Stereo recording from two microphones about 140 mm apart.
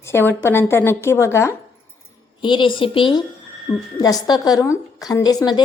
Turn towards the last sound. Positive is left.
turn(degrees=25)  # may be behind; listen again after turning